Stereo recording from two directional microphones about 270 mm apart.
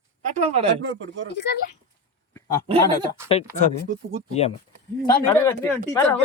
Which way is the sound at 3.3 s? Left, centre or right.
Left.